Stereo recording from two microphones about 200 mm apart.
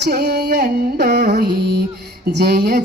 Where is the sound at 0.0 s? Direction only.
50° right (ahead or behind).